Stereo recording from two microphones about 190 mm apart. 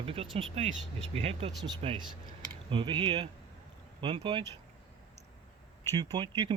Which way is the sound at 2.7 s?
25° right (ahead or behind).